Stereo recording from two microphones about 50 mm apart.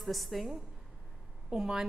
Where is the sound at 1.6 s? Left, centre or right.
Centre.